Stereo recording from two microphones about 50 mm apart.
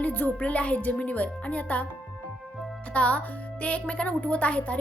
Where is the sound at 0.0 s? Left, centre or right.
Left.